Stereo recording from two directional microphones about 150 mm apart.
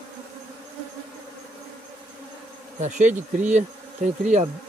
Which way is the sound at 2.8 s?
55° right (ahead or behind).